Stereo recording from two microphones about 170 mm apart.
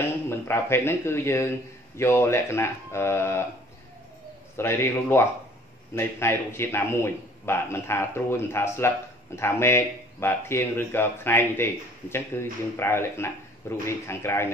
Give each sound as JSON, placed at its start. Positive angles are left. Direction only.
{"t": 0.0, "sound": "a man's voice", "side_deg": 15}
{"t": 4.6, "sound": "a man's voice", "side_deg": 15}